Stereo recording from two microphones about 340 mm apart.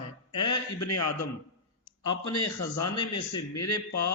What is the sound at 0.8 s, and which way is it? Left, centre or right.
Speech, left.